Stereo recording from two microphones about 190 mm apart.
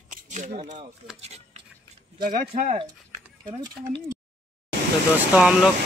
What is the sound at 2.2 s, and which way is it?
Speech, 50° right (ahead or behind).